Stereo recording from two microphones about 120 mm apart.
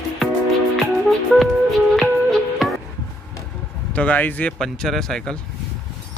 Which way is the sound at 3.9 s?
10° left (ahead or behind).